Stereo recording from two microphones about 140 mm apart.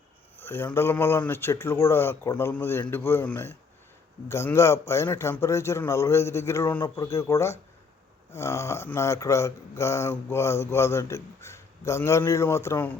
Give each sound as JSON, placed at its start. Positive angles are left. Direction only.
{"t": 0.3, "sound": "speech", "side_deg": 15}